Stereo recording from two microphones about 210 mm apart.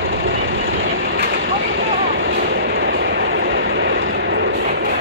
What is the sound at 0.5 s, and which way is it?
Train, 45° right (ahead or behind).